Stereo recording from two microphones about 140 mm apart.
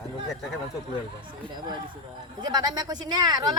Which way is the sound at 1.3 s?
35° right (ahead or behind).